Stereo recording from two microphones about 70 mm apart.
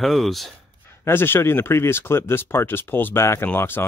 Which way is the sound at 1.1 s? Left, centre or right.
Left.